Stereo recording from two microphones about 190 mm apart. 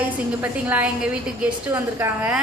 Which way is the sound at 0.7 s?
5° right (ahead or behind).